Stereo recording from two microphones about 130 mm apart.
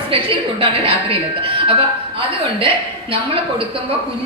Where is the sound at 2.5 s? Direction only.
45° right (ahead or behind).